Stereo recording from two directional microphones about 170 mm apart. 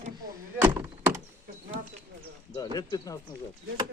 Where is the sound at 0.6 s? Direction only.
15° right (ahead or behind).